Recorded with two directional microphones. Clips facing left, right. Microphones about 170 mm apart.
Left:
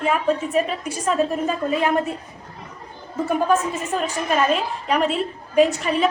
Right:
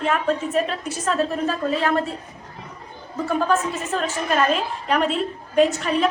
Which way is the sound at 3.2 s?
15° left (ahead or behind).